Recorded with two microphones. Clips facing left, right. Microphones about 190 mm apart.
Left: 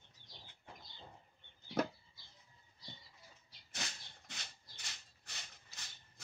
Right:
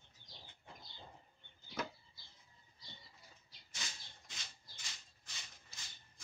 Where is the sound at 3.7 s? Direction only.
65° left (ahead or behind).